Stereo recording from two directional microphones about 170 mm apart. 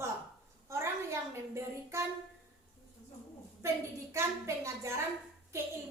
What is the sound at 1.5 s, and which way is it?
Speech, 15° right (ahead or behind).